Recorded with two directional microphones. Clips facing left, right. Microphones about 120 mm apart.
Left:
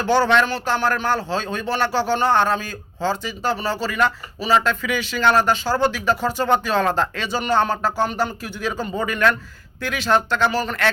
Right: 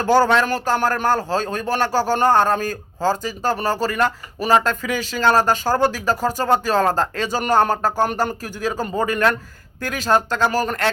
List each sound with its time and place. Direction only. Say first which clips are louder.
0.0 s speech: right 2 dB; 40° right (ahead or behind)